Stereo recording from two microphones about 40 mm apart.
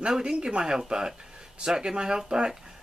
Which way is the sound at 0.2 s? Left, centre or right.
Right.